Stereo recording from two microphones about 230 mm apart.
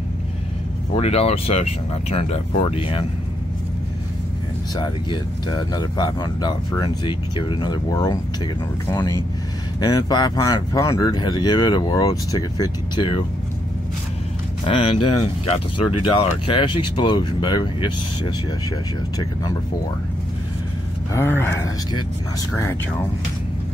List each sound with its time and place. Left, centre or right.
0.9 s speech: left
4.7 s speech: centre
9.8 s speech: centre
14.7 s speech: left
21.1 s speech: centre